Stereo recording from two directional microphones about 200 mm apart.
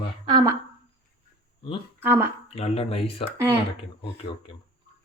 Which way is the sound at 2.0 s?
10° right (ahead or behind).